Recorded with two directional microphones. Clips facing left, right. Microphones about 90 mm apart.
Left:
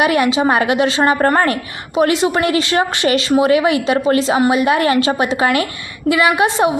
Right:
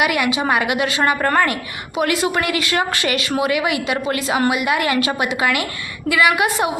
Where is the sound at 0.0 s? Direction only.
30° left (ahead or behind).